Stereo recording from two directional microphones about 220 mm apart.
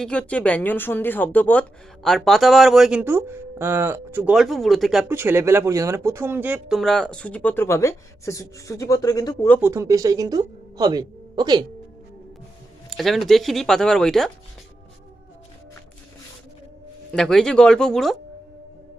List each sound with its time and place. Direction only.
0.0 s speech: 5° left (ahead or behind)
9.6 s speech: 10° right (ahead or behind)
12.9 s speech: centre (ahead or behind)
17.1 s speech: 5° left (ahead or behind)